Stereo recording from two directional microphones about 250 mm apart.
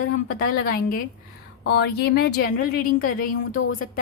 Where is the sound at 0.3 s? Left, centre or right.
Left.